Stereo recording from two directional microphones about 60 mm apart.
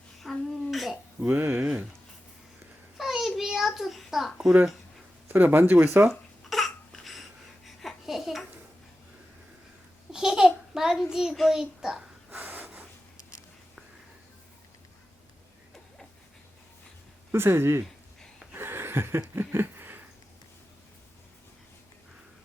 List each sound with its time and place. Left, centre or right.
0.2 s a sound: centre
1.2 s speech: right
3.0 s a sound: centre
5.3 s speech: right
6.5 s babbling: centre
10.1 s babbling: centre
10.9 s a child's voice: centre
12.3 s snort: right
17.3 s speech: right
18.5 s a sound: right